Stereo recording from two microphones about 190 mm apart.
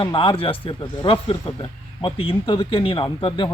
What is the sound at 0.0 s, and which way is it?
A man's voice, 25° left (ahead or behind).